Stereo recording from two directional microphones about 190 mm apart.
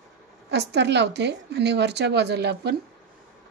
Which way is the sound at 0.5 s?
60° right (ahead or behind).